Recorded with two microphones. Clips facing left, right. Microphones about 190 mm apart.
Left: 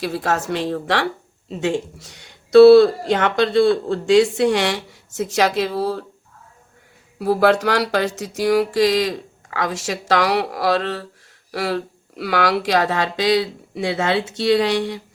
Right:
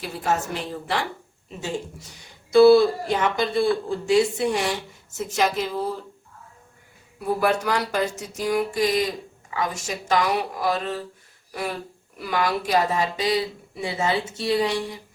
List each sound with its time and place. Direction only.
0.0 s speech: 80° left
7.2 s speech: 80° left